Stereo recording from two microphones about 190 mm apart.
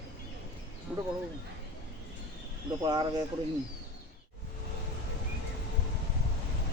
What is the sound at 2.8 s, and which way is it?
Speech, 25° right (ahead or behind).